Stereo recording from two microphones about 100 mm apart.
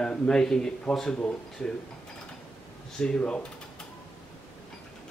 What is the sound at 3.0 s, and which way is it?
Speech, 5° left (ahead or behind).